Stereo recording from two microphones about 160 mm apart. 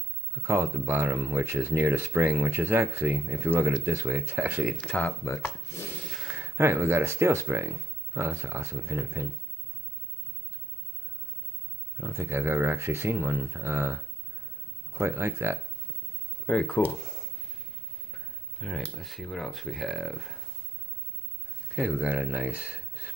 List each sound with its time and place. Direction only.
0.4 s speech: 20° right (ahead or behind)
4.7 s speech: 10° left (ahead or behind)
6.1 s speech: 10° right (ahead or behind)
12.0 s speech: 15° right (ahead or behind)
15.0 s speech: 15° right (ahead or behind)
16.4 s speech: 5° left (ahead or behind)
18.1 s speech: centre (ahead or behind)
21.7 s speech: 5° right (ahead or behind)